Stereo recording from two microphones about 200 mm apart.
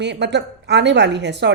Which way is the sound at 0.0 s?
60° right (ahead or behind).